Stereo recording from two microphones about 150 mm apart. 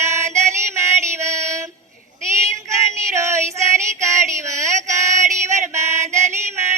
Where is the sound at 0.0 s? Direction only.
20° right (ahead or behind).